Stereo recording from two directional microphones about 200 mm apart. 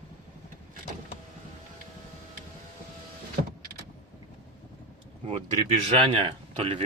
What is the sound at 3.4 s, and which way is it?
Power windows, 40° right (ahead or behind).